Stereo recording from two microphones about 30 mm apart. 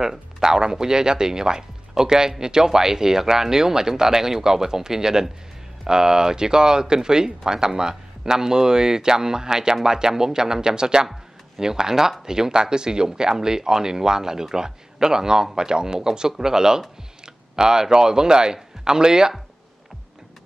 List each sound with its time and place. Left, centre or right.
0.0 s speech: centre